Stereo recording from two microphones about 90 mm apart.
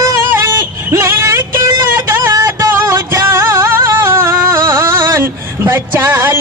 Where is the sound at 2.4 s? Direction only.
40° right (ahead or behind).